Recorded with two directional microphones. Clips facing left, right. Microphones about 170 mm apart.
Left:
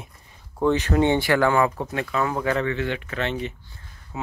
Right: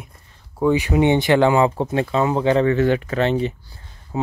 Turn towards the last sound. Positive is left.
turn(degrees=-30)  # may be behind; listen again after turning